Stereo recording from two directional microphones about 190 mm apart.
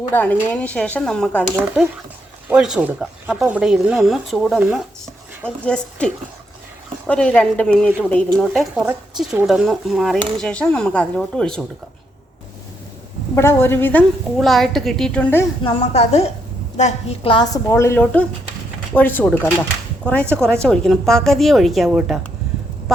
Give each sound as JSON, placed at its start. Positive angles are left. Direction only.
{"t": 0.1, "sound": "speech", "side_deg": 10}
{"t": 2.5, "sound": "speech", "side_deg": -5}
{"t": 7.1, "sound": "speech", "side_deg": 5}
{"t": 8.7, "sound": "speech", "side_deg": -5}
{"t": 13.3, "sound": "speech", "side_deg": 15}
{"t": 15.6, "sound": "a woman's voice", "side_deg": 35}